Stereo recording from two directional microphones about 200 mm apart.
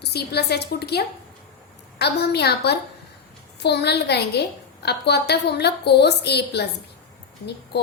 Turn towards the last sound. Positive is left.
turn(degrees=55)  # may be behind; listen again after turning